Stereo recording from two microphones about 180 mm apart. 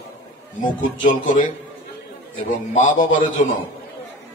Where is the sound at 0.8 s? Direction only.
45° left (ahead or behind).